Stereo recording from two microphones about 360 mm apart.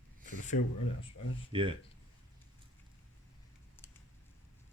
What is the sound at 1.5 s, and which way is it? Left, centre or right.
Speech, centre.